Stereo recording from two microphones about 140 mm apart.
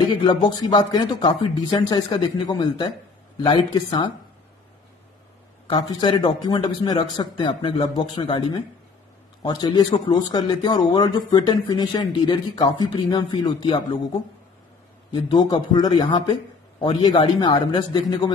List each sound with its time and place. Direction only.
0.1 s speech: 30° left (ahead or behind)
5.7 s speech: 30° left (ahead or behind)
9.4 s speech: 30° left (ahead or behind)
15.0 s speech: 30° left (ahead or behind)